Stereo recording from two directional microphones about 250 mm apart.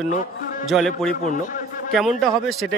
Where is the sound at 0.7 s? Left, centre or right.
Centre.